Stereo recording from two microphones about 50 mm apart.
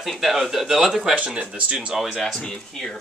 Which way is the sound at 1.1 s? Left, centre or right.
Centre.